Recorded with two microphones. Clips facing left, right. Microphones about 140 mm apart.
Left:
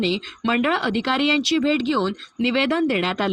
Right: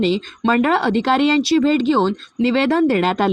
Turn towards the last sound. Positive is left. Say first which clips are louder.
# right 5 dB
turn(degrees=-45)  # may be behind; listen again after turning